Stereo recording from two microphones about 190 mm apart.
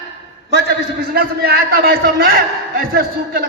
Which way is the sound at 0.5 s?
55° right (ahead or behind).